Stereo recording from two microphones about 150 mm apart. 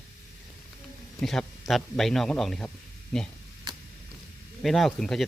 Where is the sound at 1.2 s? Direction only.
Centre (ahead or behind).